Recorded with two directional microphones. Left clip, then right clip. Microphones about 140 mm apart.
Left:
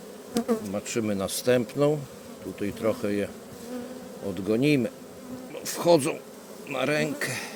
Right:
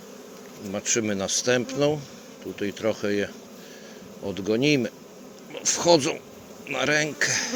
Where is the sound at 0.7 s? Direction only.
20° left (ahead or behind).